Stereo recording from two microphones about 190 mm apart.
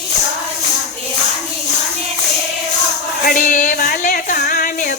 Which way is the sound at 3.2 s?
45° left (ahead or behind).